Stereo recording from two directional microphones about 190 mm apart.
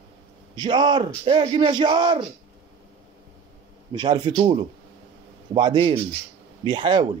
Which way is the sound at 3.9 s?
25° right (ahead or behind).